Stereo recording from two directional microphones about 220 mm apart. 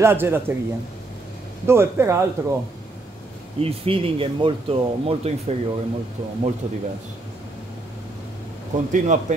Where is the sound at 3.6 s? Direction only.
25° right (ahead or behind).